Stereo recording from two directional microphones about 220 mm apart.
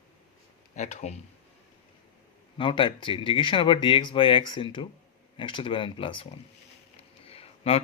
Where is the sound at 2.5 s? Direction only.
20° left (ahead or behind).